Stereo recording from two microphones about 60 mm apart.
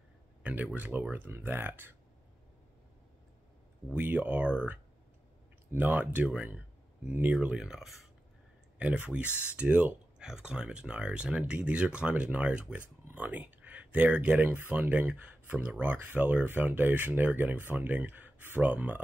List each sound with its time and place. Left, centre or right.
0.4 s a sound: right
0.7 s speech: right
3.9 s speech: right
5.8 s speech: right
7.6 s speech: centre
8.7 s speech: right
9.3 s speech: left
9.6 s speech: right
10.1 s speech: centre